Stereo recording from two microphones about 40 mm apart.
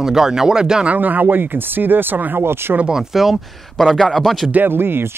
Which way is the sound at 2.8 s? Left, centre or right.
Centre.